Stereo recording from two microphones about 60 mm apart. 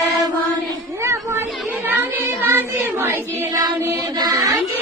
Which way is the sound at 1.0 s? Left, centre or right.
Right.